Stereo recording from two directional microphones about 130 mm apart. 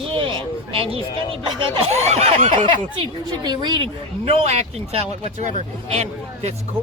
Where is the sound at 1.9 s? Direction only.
55° right (ahead or behind).